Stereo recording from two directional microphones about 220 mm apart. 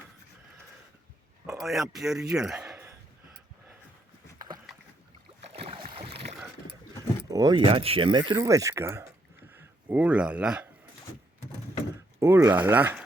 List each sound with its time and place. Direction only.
1.5 s speech: centre (ahead or behind)
2.3 s a sound: 5° right (ahead or behind)
5.5 s boat: 25° right (ahead or behind)
7.3 s speech: 15° right (ahead or behind)
12.2 s speech: 15° right (ahead or behind)